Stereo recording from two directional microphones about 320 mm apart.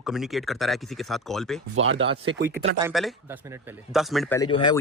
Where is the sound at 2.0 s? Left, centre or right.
Centre.